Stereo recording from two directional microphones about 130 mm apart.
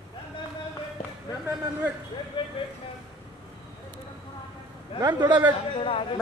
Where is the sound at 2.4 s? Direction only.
40° left (ahead or behind).